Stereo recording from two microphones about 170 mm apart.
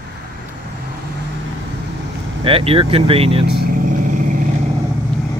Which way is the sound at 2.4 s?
35° right (ahead or behind).